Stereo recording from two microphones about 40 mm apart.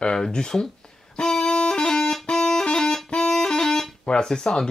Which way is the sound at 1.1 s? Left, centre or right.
Centre.